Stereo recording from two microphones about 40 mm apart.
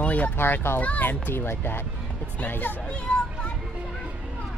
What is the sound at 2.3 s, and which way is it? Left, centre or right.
Speech, left.